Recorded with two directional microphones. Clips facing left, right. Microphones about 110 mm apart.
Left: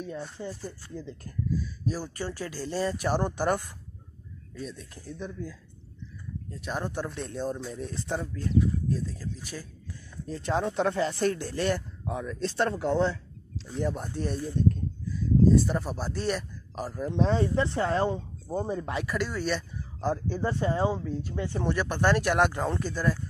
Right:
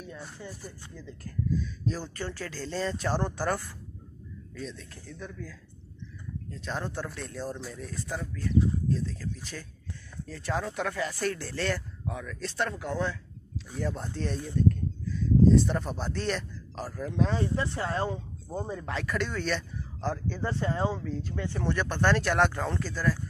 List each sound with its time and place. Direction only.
0.5 s speech: 10° right (ahead or behind)
0.9 s speech: 20° left (ahead or behind)
1.5 s speech: 5° left (ahead or behind); by 8.5 s 30° left (ahead or behind)
8.9 s speech: 15° left (ahead or behind)
10.2 s speech: 20° left (ahead or behind)
13.7 s speech: 15° left (ahead or behind)
15.1 s speech: 5° left (ahead or behind)
19.0 s speech: 5° left (ahead or behind)